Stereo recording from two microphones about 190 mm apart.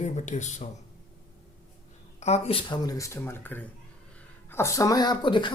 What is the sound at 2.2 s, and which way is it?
Speech, 35° left (ahead or behind).